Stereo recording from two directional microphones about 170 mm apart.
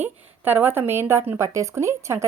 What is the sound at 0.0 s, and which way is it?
A woman's voice, 10° right (ahead or behind).